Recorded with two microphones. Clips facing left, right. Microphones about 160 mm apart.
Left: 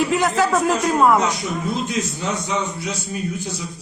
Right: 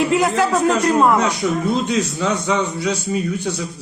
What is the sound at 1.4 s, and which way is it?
A man's voice, 70° right (ahead or behind).